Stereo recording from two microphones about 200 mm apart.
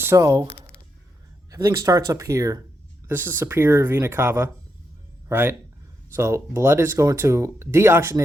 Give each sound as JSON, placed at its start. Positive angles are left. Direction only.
{"t": 0.0, "sound": "speech", "side_deg": -15}
{"t": 1.5, "sound": "speech", "side_deg": -15}